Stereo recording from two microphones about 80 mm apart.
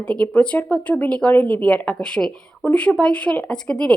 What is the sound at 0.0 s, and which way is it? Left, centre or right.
A woman's voice, centre.